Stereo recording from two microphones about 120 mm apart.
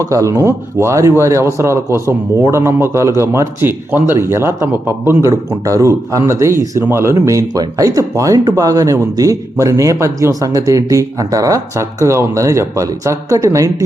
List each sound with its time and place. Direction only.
0.0 s a man's voice: 25° right (ahead or behind)